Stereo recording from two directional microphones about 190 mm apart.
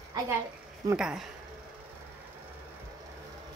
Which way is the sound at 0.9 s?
5° right (ahead or behind).